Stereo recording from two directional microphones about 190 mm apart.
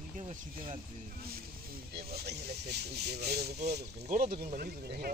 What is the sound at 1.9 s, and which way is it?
Speech, 55° right (ahead or behind).